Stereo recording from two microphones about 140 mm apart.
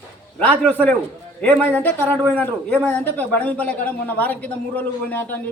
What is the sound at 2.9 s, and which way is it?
Speech, 10° left (ahead or behind).